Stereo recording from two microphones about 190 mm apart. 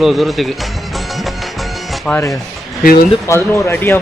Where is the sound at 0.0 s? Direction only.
Centre (ahead or behind).